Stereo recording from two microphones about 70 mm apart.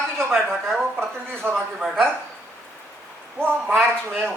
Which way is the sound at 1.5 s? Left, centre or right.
Centre.